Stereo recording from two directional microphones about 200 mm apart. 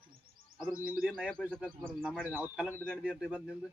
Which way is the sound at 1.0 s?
Centre (ahead or behind).